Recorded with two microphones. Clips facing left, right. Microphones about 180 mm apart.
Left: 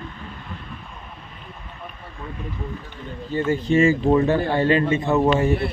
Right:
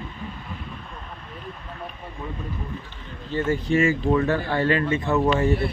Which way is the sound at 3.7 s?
30° left (ahead or behind).